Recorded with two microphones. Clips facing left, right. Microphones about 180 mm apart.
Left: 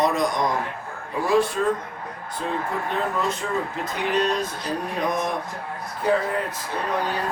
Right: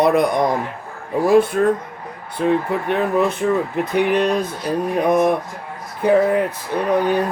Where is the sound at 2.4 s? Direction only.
65° right (ahead or behind).